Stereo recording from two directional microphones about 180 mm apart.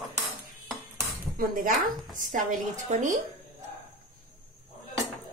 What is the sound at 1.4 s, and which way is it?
Speech, 50° right (ahead or behind).